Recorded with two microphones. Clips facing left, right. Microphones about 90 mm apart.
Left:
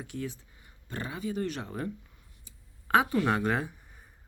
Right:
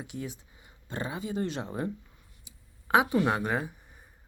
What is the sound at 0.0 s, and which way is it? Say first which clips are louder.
Speech: left 1 dB; 15° right (ahead or behind).